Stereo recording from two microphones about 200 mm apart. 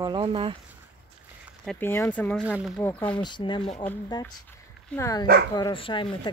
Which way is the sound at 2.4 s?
5° right (ahead or behind).